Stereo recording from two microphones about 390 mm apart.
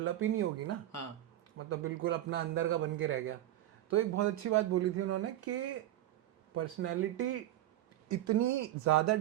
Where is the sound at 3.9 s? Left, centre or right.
Right.